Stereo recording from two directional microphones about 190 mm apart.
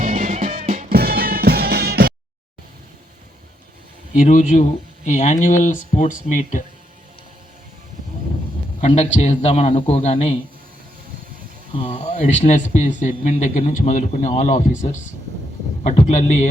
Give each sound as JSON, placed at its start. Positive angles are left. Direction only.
{"t": 0.0, "sound": "music", "side_deg": -40}
{"t": 4.1, "sound": "a man's voice", "side_deg": 40}
{"t": 8.8, "sound": "a man's voice", "side_deg": 35}
{"t": 11.8, "sound": "a man's voice", "side_deg": 30}